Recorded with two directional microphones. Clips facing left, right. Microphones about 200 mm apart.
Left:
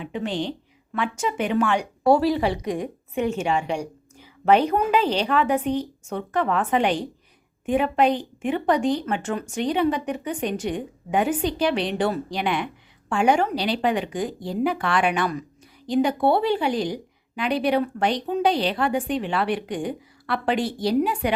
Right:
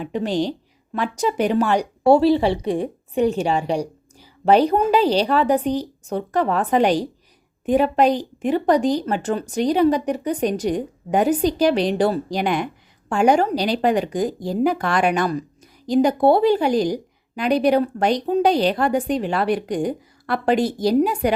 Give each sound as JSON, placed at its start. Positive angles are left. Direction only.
{"t": 0.0, "sound": "speech", "side_deg": -40}